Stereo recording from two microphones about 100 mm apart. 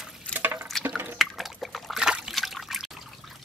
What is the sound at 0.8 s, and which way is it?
Drip, 20° right (ahead or behind).